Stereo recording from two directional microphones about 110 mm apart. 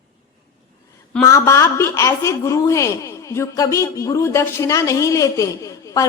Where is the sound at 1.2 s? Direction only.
25° left (ahead or behind).